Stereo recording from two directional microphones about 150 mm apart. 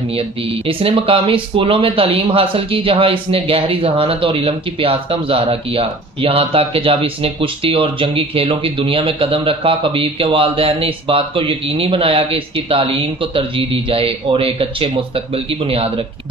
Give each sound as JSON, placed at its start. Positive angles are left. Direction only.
{"t": 0.7, "sound": "speech", "side_deg": -35}